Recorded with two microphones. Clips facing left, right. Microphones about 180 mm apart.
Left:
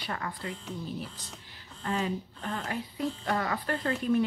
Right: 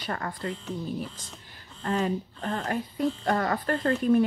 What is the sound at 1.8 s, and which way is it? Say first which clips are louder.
Speech: right 4 dB; 45° right (ahead or behind).